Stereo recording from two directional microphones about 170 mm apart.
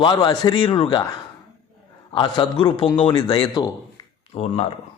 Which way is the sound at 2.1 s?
30° left (ahead or behind).